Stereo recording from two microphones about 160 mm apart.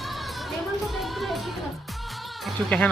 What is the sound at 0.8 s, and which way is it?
Music, centre (ahead or behind).